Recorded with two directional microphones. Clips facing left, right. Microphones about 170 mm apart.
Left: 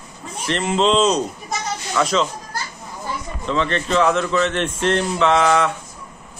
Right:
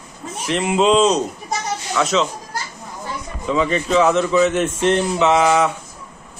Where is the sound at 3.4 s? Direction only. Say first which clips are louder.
Right 2 dB; 10° right (ahead or behind).